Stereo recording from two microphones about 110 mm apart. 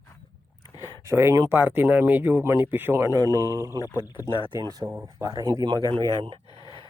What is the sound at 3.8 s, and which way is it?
Speech, 30° left (ahead or behind).